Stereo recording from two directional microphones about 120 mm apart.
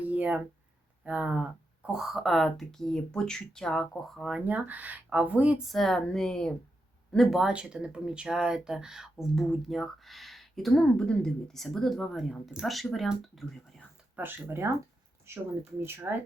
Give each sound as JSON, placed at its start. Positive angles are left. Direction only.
{"t": 0.0, "sound": "a sound", "side_deg": -15}
{"t": 1.0, "sound": "speech", "side_deg": -10}
{"t": 5.6, "sound": "speech", "side_deg": 5}
{"t": 14.2, "sound": "speech", "side_deg": -20}
{"t": 15.8, "sound": "speech", "side_deg": -20}